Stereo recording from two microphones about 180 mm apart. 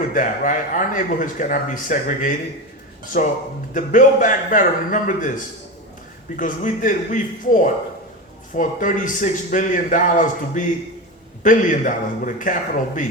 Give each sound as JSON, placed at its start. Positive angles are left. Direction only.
{"t": 0.1, "sound": "speech", "side_deg": 45}
{"t": 6.3, "sound": "speech", "side_deg": 45}